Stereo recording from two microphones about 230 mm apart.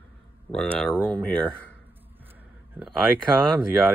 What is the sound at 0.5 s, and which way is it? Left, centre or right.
Speech, centre.